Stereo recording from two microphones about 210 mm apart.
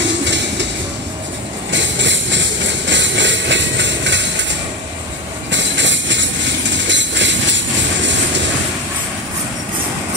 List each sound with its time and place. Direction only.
0.2 s music: 55° right (ahead or behind)
1.7 s a sound: 60° right (ahead or behind)
5.5 s train: 60° right (ahead or behind)